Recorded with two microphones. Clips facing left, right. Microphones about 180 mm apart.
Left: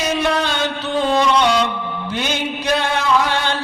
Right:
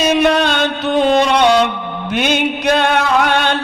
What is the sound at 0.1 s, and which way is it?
Music, 65° right (ahead or behind).